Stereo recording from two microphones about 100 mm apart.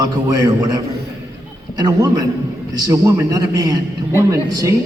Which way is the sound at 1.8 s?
40° right (ahead or behind).